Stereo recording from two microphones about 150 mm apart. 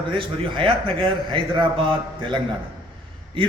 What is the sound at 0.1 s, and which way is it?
A man's voice, 35° right (ahead or behind).